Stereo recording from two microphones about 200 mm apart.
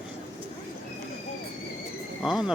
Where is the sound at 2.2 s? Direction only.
5° right (ahead or behind).